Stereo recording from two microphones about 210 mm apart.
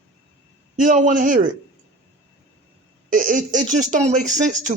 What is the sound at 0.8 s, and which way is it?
Speech, 40° right (ahead or behind).